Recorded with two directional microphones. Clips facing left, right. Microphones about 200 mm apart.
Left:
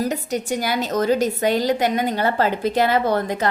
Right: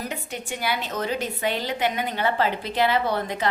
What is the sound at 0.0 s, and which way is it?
A woman's voice, 40° left (ahead or behind).